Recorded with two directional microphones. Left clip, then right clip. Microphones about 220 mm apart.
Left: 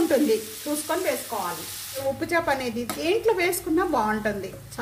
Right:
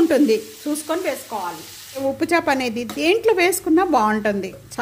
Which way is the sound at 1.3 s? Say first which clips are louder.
Right 2 dB; 45° right (ahead or behind).